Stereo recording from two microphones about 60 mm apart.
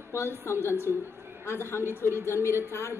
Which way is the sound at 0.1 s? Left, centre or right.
Left.